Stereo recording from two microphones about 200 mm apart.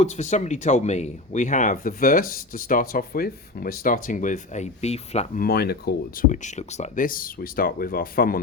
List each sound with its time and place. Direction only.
0.0 s speech: 35° left (ahead or behind)